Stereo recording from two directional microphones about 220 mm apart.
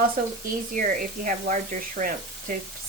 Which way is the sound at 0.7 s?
35° right (ahead or behind).